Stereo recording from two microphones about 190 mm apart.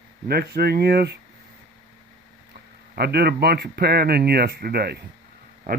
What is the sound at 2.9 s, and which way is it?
Speech, 60° right (ahead or behind).